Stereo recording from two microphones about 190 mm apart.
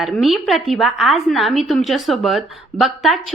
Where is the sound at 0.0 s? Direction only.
Centre (ahead or behind).